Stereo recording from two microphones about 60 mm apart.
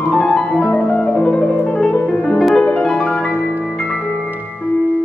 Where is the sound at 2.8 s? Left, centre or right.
Centre.